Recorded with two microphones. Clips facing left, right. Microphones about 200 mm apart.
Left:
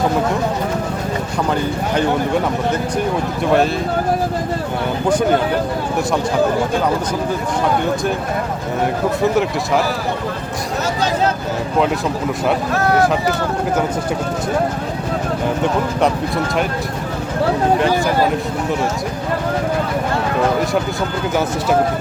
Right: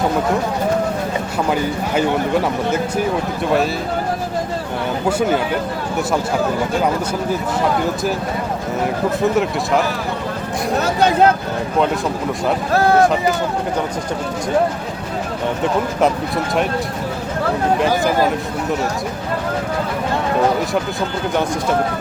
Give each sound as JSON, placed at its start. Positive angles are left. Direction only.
{"t": 5.0, "sound": "speech", "side_deg": -5}
{"t": 9.2, "sound": "speech", "side_deg": 0}
{"t": 10.8, "sound": "speech", "side_deg": -55}